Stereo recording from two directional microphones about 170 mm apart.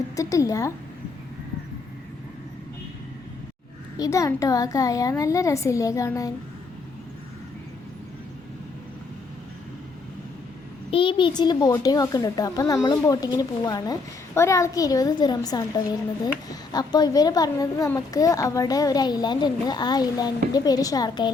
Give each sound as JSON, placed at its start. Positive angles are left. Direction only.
{"t": 0.2, "sound": "speech", "side_deg": 20}
{"t": 3.9, "sound": "speech", "side_deg": 20}
{"t": 10.9, "sound": "speech", "side_deg": 30}